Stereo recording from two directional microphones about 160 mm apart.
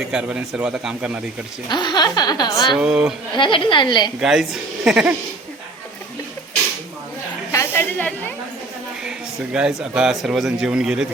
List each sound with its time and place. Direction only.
0.1 s a man's voice: 5° right (ahead or behind)
1.7 s a woman's voice: 25° left (ahead or behind)
2.7 s a man's voice: 5° right (ahead or behind)
3.3 s a woman's voice: 30° left (ahead or behind)
4.2 s a man's voice: centre (ahead or behind)
7.5 s snake: 15° left (ahead or behind)
9.0 s a man's voice: 5° right (ahead or behind)